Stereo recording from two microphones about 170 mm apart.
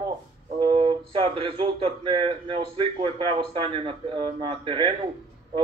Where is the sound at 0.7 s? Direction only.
35° right (ahead or behind).